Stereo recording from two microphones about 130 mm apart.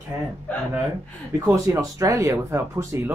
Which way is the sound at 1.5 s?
25° right (ahead or behind).